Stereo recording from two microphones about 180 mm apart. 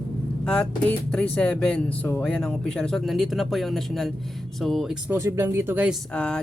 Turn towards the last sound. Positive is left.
turn(degrees=5)  # may be behind; listen again after turning